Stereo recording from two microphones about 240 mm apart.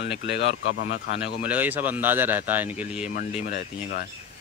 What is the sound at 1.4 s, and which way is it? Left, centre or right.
Speech, centre.